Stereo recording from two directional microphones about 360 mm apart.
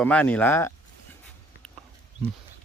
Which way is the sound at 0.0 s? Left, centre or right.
Centre.